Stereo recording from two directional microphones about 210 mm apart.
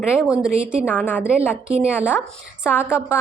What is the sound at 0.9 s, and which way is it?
Speech, 10° left (ahead or behind).